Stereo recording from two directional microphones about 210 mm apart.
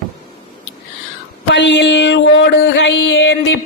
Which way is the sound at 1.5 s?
55° left (ahead or behind).